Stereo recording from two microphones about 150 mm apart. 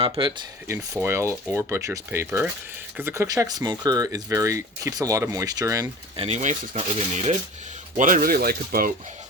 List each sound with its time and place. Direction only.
0.0 s speech: 30° right (ahead or behind)
1.0 s speech: 15° right (ahead or behind)
6.1 s speech: 45° right (ahead or behind)
7.9 s speech: 65° right (ahead or behind); by 8.9 s 85° right